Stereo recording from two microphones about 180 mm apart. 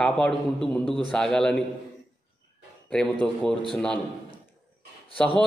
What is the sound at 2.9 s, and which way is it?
A man's voice, 5° left (ahead or behind).